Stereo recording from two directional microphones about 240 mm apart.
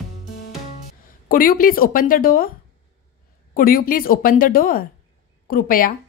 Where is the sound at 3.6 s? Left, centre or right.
Left.